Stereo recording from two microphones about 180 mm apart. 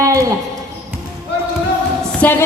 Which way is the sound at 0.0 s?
15° right (ahead or behind).